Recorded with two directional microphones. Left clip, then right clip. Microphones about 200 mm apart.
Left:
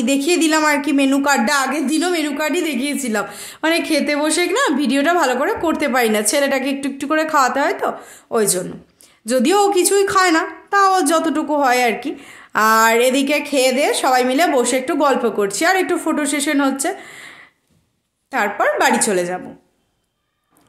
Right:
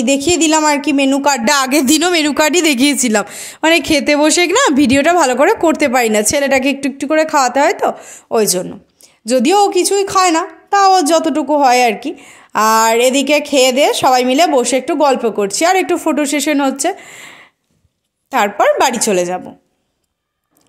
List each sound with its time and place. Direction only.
0.0 s speech: 25° right (ahead or behind)
1.3 s a man's voice: 40° right (ahead or behind)